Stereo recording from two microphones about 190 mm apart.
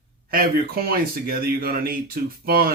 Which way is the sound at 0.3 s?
50° right (ahead or behind).